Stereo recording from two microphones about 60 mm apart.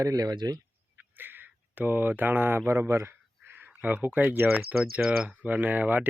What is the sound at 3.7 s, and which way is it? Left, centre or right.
Speech, right.